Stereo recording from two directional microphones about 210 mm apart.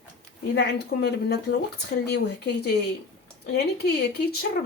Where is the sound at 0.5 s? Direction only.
50° left (ahead or behind).